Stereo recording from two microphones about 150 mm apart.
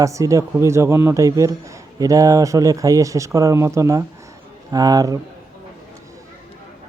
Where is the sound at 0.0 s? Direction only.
20° right (ahead or behind).